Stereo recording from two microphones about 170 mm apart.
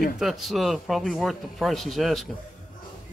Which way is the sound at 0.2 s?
Centre (ahead or behind).